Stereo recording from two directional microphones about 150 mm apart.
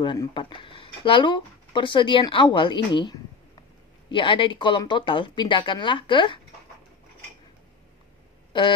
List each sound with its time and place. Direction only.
0.0 s speech: 30° left (ahead or behind)
8.5 s speech: 35° left (ahead or behind)